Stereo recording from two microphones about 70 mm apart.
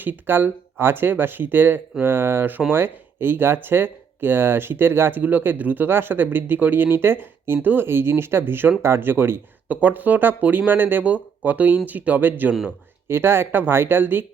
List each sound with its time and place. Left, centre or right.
0.0 s speech: right
12.6 s speech: right